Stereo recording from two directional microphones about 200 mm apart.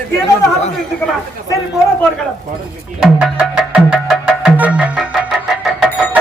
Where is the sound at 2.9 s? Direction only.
5° right (ahead or behind).